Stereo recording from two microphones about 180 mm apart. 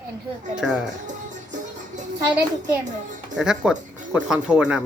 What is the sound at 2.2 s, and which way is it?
A child's voice, 10° right (ahead or behind).